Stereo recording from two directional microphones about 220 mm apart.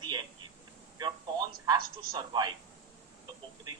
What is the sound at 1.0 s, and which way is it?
Speech, 20° right (ahead or behind).